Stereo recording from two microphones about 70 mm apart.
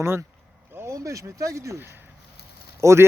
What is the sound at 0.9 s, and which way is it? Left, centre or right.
A man's voice, right.